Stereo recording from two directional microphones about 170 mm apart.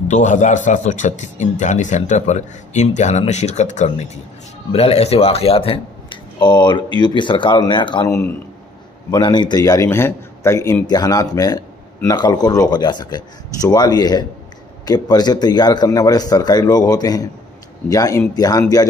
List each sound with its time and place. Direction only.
0.1 s a man's voice: 45° left (ahead or behind); by 8.1 s 25° left (ahead or behind)
9.1 s speech: 25° left (ahead or behind)